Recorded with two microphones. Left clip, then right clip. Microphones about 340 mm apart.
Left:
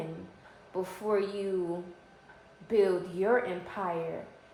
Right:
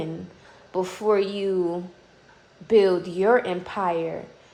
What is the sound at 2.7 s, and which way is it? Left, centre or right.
Speech, right.